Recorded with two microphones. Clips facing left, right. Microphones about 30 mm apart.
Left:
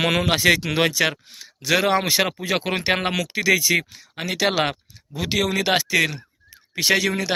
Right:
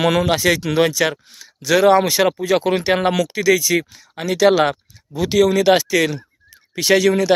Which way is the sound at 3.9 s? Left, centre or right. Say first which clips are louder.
Right 5 dB; centre.